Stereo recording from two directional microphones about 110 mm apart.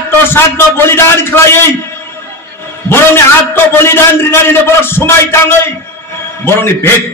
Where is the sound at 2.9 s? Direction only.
20° left (ahead or behind).